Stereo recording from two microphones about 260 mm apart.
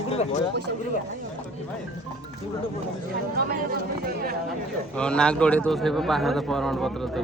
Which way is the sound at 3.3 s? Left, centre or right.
Right.